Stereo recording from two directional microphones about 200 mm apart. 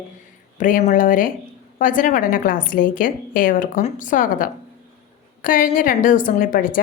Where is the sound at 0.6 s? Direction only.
45° left (ahead or behind).